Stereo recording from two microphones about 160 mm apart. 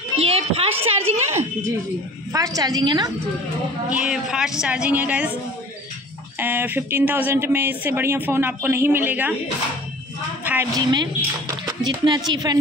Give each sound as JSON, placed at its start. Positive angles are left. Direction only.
{"t": 0.2, "sound": "a sound", "side_deg": -40}
{"t": 2.3, "sound": "a woman's voice", "side_deg": -20}
{"t": 3.9, "sound": "speech", "side_deg": -5}
{"t": 6.4, "sound": "speech", "side_deg": -10}
{"t": 10.4, "sound": "a sound", "side_deg": -10}
{"t": 10.8, "sound": "a woman's voice", "side_deg": -25}